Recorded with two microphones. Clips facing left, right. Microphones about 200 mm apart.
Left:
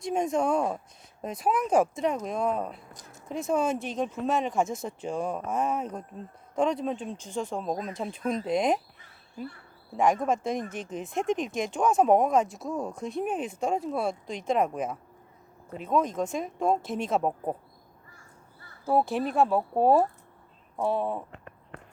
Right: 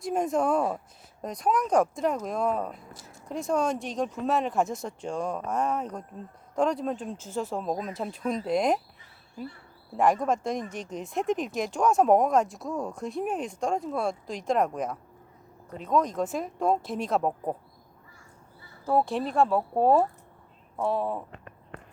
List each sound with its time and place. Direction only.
0.0 s speech: centre (ahead or behind)
10.0 s speech: centre (ahead or behind)
18.9 s speech: 5° left (ahead or behind)